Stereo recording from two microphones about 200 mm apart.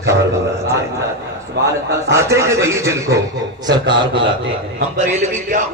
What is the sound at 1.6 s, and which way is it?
Speech, 55° right (ahead or behind).